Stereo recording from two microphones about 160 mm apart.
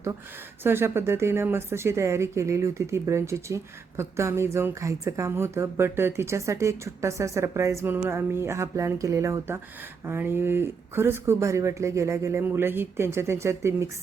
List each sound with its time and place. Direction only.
0.6 s speech: 15° right (ahead or behind)